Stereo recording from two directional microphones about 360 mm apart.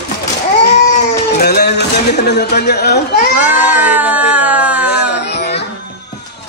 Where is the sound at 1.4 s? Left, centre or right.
Left.